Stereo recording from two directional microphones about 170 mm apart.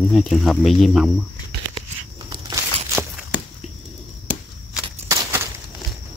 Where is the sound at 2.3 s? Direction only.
15° right (ahead or behind).